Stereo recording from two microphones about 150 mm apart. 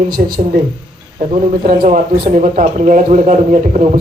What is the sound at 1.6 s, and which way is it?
A man's voice, 55° right (ahead or behind).